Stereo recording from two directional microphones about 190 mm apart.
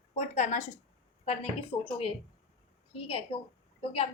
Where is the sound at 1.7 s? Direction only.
25° left (ahead or behind).